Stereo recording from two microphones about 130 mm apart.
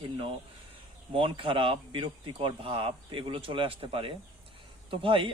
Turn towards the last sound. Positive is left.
turn(degrees=-40)  # may be behind; listen again after turning